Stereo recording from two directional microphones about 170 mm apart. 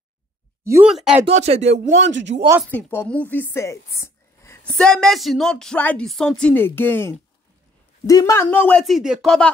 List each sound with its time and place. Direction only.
0.8 s speech: 5° right (ahead or behind)
1.2 s speech: 35° right (ahead or behind)
1.6 s a man's voice: 90° right
2.7 s speech: 10° left (ahead or behind)
3.5 s a sound: 20° left (ahead or behind)
4.7 s speech: 5° left (ahead or behind)